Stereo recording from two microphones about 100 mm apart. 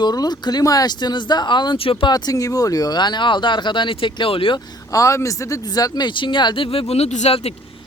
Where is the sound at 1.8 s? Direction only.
65° left (ahead or behind).